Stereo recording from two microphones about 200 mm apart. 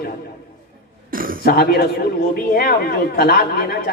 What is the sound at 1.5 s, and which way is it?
A woman's voice, 50° left (ahead or behind).